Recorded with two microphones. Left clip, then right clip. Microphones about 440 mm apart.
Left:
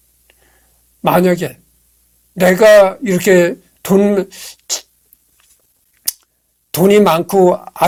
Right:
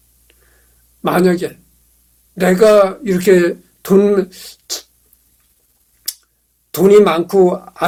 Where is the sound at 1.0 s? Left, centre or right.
Left.